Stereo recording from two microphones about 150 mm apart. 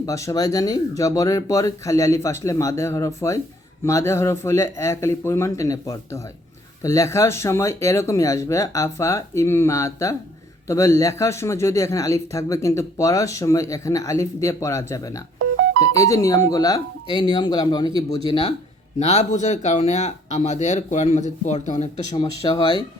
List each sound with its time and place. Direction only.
0.0 s speech: 20° left (ahead or behind)
18.3 s speech: 40° left (ahead or behind)
22.1 s speech: 30° left (ahead or behind)